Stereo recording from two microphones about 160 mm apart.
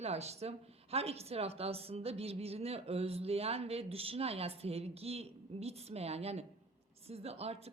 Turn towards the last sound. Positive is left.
turn(degrees=-40)  # may be behind; listen again after turning